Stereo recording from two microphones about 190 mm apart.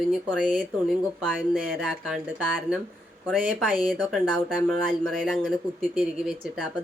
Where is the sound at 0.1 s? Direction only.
5° left (ahead or behind).